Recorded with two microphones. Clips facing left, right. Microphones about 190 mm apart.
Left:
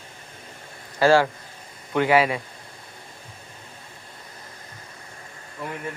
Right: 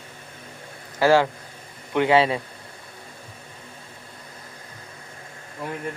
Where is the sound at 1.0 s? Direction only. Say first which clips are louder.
Even; 15° right (ahead or behind).